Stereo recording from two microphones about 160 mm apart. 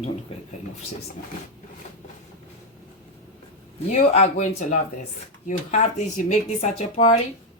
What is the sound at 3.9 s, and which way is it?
Speech, 45° left (ahead or behind).